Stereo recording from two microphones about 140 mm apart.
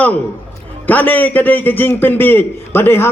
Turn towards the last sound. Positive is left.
turn(degrees=15)  # may be behind; listen again after turning